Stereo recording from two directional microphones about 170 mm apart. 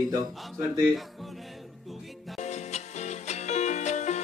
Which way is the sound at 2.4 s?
40° left (ahead or behind).